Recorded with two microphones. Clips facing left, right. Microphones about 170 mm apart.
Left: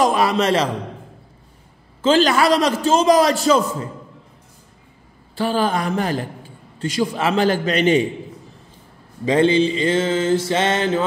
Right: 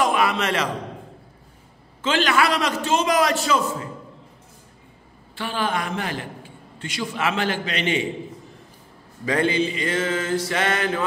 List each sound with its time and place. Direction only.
0.0 s a man's voice: 35° left (ahead or behind)
2.0 s a man's voice: 35° left (ahead or behind)
5.3 s a man's voice: 35° left (ahead or behind)
9.2 s mantra: 25° left (ahead or behind)